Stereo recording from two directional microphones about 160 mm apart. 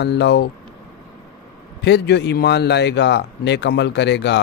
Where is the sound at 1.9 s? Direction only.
90° left.